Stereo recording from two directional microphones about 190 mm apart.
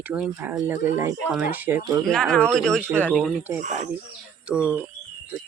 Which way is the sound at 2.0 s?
Centre (ahead or behind).